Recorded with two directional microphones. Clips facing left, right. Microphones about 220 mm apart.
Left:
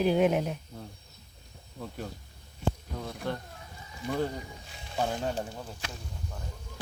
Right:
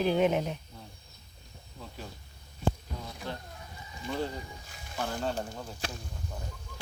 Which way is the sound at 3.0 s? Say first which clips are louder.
Left 6 dB; 55° left (ahead or behind).